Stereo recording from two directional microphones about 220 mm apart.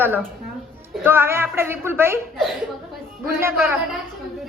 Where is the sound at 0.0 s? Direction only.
10° right (ahead or behind).